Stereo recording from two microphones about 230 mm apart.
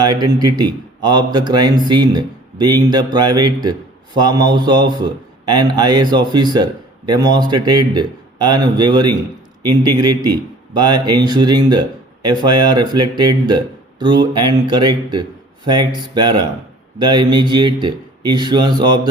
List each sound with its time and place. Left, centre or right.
0.0 s a man's voice: centre